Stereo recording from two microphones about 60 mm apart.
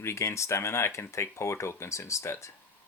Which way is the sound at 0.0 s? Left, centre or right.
Left.